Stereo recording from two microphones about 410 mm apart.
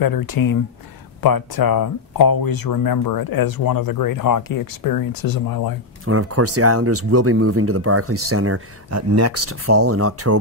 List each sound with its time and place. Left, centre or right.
0.0 s speech: left
6.0 s speech: right